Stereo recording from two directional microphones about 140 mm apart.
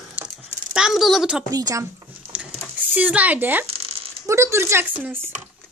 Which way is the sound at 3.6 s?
45° right (ahead or behind).